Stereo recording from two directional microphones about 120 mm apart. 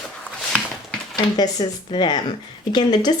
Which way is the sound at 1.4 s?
40° left (ahead or behind).